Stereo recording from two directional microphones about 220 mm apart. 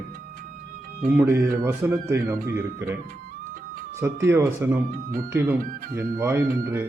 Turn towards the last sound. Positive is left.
turn(degrees=-10)  # may be behind; listen again after turning